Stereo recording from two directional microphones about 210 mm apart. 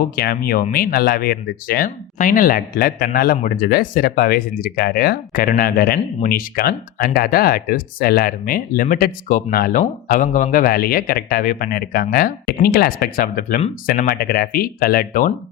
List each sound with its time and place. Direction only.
0.0 s speech: 45° left (ahead or behind)